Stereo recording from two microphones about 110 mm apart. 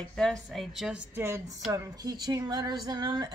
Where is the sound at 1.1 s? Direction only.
25° right (ahead or behind).